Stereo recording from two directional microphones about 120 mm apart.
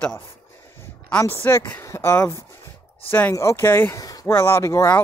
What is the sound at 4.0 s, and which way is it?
Speech, 30° left (ahead or behind).